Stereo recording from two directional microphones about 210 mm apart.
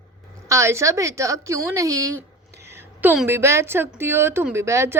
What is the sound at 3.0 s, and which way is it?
A woman's voice, 10° right (ahead or behind).